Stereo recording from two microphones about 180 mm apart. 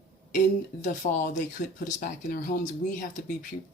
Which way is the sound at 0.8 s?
45° left (ahead or behind).